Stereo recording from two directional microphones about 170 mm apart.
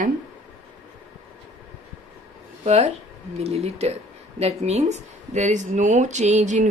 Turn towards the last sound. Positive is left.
turn(degrees=-45)  # may be behind; listen again after turning